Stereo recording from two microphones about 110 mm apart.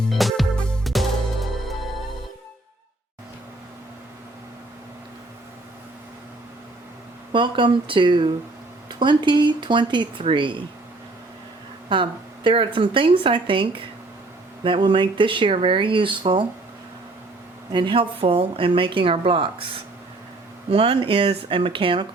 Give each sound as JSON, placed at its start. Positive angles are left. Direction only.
{"t": 0.1, "sound": "music", "side_deg": 0}
{"t": 7.3, "sound": "speech", "side_deg": -45}
{"t": 11.9, "sound": "speech", "side_deg": -50}
{"t": 17.7, "sound": "speech", "side_deg": -45}
{"t": 20.7, "sound": "speech", "side_deg": -60}